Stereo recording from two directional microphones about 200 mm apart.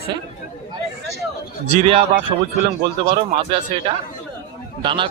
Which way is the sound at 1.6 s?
30° right (ahead or behind).